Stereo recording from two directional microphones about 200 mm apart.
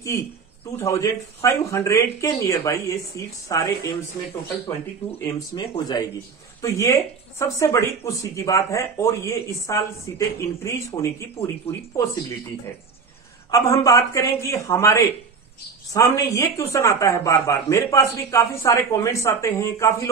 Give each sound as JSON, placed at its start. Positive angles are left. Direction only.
{"t": 0.7, "sound": "speech", "side_deg": 15}
{"t": 5.5, "sound": "speech", "side_deg": 20}
{"t": 13.5, "sound": "speech", "side_deg": 15}